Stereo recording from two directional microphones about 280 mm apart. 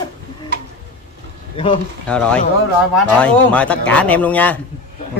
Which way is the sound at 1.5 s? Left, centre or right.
Centre.